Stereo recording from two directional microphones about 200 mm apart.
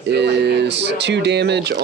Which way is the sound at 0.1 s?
55° right (ahead or behind).